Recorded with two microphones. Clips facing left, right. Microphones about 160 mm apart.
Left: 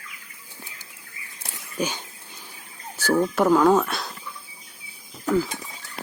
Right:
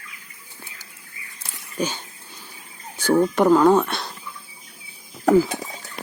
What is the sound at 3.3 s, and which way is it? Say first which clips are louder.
Speech: right 2 dB; centre (ahead or behind).